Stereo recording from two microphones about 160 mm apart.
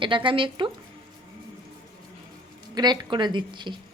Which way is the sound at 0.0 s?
30° right (ahead or behind).